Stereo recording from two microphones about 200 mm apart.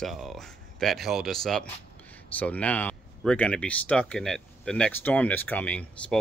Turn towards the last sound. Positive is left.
turn(degrees=5)  # may be behind; listen again after turning